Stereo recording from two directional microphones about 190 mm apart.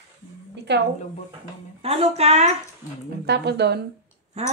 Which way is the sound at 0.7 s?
65° right (ahead or behind).